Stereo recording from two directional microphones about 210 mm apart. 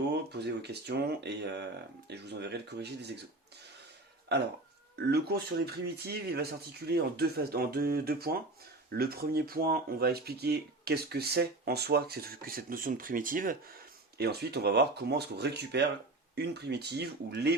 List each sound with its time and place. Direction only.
0.1 s speech: 50° right (ahead or behind)
4.9 s speech: 50° right (ahead or behind)